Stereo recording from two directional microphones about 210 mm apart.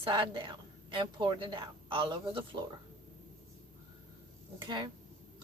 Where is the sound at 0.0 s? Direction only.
25° right (ahead or behind).